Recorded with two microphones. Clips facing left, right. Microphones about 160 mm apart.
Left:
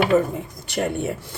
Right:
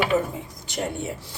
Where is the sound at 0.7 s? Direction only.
60° left (ahead or behind).